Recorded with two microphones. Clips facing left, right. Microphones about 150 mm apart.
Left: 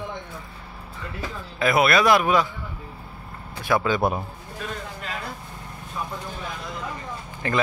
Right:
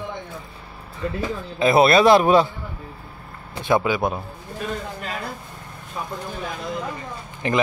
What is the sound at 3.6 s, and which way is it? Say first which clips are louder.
Speech: right 3 dB; 20° right (ahead or behind).